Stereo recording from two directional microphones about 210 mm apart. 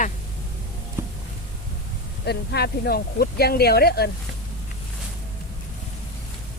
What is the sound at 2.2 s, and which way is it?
Speech, 50° left (ahead or behind).